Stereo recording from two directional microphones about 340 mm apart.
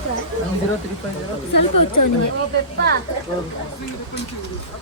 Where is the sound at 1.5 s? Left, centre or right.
Left.